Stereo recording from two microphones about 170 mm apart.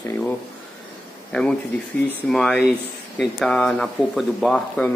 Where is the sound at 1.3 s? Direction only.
5° left (ahead or behind).